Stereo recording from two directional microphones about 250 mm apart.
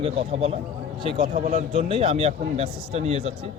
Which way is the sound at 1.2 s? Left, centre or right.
Right.